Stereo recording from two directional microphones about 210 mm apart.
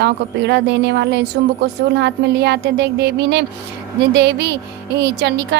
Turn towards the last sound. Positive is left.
turn(degrees=-55)  # may be behind; listen again after turning